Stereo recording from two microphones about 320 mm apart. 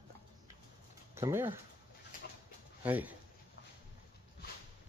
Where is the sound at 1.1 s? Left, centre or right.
Centre.